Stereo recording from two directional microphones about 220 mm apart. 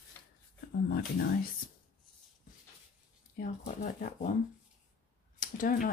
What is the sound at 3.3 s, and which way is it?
Speech, 40° left (ahead or behind).